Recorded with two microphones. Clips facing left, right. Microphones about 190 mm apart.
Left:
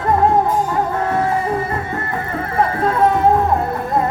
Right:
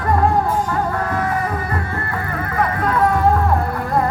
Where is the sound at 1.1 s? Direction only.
25° left (ahead or behind).